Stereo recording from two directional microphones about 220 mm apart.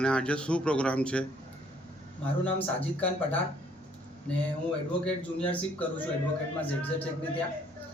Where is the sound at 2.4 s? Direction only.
5° left (ahead or behind).